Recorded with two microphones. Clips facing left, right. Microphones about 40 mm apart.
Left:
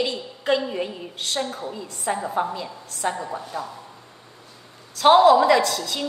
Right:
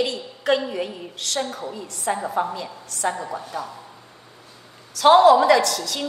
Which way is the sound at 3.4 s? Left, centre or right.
Centre.